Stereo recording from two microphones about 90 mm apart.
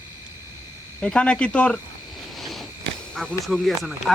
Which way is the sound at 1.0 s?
10° left (ahead or behind).